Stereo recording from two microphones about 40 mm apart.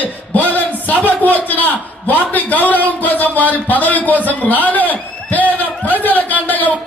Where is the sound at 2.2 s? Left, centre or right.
Left.